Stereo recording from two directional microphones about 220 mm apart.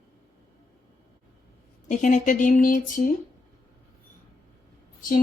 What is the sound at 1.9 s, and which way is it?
Speech, 35° left (ahead or behind).